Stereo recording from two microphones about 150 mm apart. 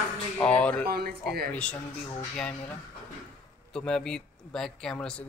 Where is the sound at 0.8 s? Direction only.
90° right.